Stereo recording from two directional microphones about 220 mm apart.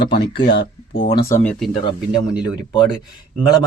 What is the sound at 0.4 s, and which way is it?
Speech, 45° left (ahead or behind).